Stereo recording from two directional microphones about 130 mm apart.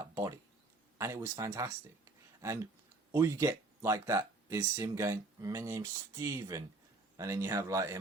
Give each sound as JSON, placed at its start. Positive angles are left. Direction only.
{"t": 0.0, "sound": "a sound", "side_deg": -25}
{"t": 0.9, "sound": "speech", "side_deg": -20}
{"t": 3.1, "sound": "speech", "side_deg": -20}